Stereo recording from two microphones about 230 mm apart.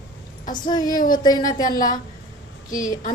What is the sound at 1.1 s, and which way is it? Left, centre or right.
Speech, centre.